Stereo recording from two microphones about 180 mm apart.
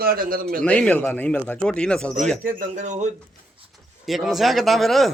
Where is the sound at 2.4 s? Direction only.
45° right (ahead or behind).